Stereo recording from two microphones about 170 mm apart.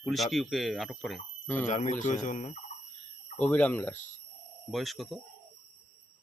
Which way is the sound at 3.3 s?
10° left (ahead or behind).